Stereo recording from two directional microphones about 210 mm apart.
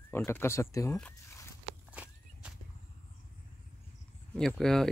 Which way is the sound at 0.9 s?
5° left (ahead or behind).